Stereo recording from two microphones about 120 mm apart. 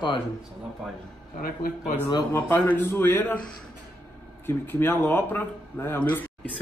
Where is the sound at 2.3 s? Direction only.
15° left (ahead or behind).